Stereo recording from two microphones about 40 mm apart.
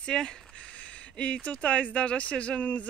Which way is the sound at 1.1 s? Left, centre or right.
Left.